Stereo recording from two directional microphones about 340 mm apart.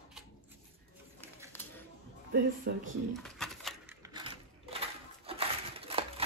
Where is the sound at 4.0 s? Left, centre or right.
Centre.